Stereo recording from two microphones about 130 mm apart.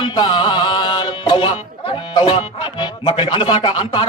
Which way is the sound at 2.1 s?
40° left (ahead or behind).